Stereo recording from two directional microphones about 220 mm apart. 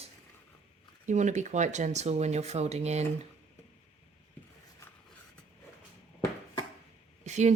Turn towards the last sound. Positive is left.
turn(degrees=-30)  # may be behind; listen again after turning